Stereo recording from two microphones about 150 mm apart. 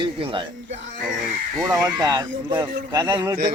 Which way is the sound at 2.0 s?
25° right (ahead or behind).